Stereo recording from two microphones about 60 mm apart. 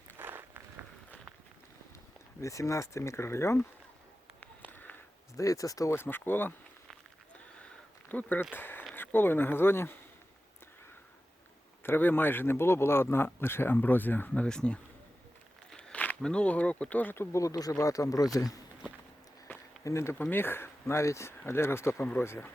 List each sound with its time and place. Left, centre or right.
0.2 s walk: right
2.4 s speech: left
4.4 s a sound: left
5.4 s speech: left
5.9 s speech: left
8.1 s speech: left
11.8 s speech: left
14.4 s speech: centre
15.7 s walk: centre
16.2 s speech: centre
17.3 s speech: left
19.5 s a sound: left
19.8 s speech: left
20.3 s speech: left